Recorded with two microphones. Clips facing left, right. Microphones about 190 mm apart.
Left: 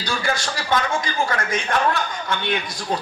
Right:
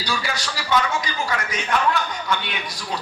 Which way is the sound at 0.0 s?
50° left (ahead or behind).